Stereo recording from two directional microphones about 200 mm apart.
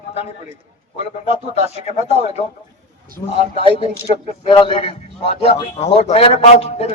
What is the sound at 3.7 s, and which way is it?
A man's voice, 25° left (ahead or behind).